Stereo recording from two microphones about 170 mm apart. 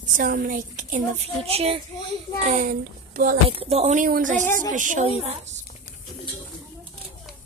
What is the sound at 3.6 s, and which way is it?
Speech, 35° right (ahead or behind).